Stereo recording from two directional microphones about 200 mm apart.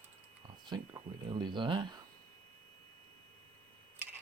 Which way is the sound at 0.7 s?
20° right (ahead or behind).